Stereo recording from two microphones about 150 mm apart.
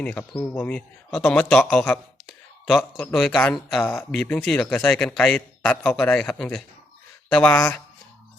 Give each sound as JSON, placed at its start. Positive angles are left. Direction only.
{"t": 0.0, "sound": "a man's voice", "side_deg": 10}
{"t": 3.8, "sound": "a man's voice", "side_deg": 15}
{"t": 4.1, "sound": "a man's voice", "side_deg": 5}